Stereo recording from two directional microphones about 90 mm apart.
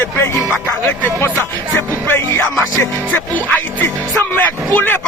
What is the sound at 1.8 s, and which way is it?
Speech, 25° left (ahead or behind).